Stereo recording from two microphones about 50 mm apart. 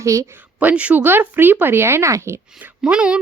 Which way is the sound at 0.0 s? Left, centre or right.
Right.